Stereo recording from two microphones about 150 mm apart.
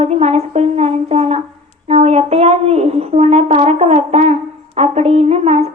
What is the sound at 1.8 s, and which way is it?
Brass instrument, 45° right (ahead or behind).